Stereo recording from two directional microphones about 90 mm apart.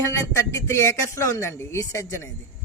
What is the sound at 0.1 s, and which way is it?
Speech, 30° left (ahead or behind).